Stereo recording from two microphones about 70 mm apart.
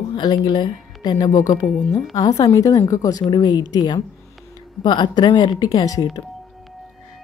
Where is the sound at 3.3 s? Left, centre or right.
Left.